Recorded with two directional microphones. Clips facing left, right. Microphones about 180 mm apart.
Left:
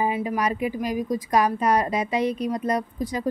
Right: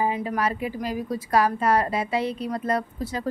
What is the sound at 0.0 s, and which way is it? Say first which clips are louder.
A woman's voice: left 1 dB; 15° left (ahead or behind).